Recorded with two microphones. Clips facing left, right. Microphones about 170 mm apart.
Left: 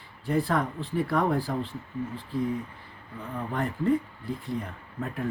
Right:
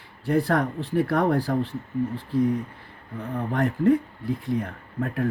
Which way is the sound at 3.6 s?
65° right (ahead or behind).